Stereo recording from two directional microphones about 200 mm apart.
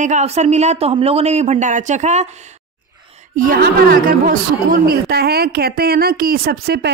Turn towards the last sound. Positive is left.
turn(degrees=-55)  # may be behind; listen again after turning